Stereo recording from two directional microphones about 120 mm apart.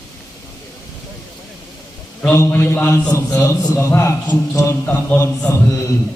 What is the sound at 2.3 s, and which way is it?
Speech, 20° left (ahead or behind).